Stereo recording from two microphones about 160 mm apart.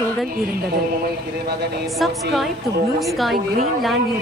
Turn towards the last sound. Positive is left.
turn(degrees=0)  # may be behind; listen again after turning